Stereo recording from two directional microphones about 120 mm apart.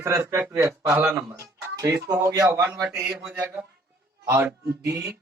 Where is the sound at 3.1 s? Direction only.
5° right (ahead or behind); by 5.1 s 20° right (ahead or behind).